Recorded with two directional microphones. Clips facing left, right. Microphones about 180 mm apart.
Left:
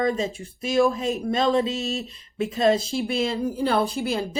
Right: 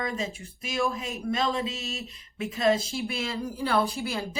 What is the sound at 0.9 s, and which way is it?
A woman's voice, 30° left (ahead or behind).